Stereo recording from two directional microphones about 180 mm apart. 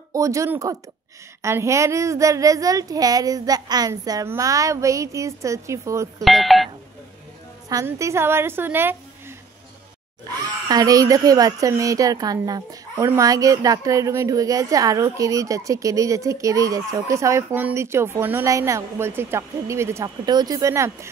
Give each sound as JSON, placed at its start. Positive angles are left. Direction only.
{"t": 0.1, "sound": "a woman's voice", "side_deg": -15}
{"t": 6.2, "sound": "speech", "side_deg": 0}
{"t": 7.7, "sound": "a woman's voice", "side_deg": -15}
{"t": 10.7, "sound": "a woman's voice", "side_deg": -20}